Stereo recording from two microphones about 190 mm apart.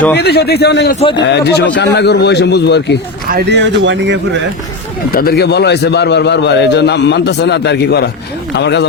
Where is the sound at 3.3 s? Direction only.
60° right (ahead or behind).